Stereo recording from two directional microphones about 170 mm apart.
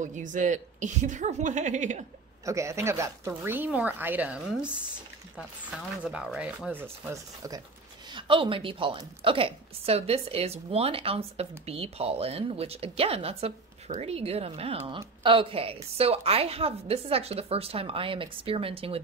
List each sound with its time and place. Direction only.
0.0 s a woman's voice: 45° right (ahead or behind)
2.4 s speech: 15° right (ahead or behind)
5.8 s speech: centre (ahead or behind); by 7.6 s 20° right (ahead or behind)
8.1 s a woman's voice: 30° right (ahead or behind)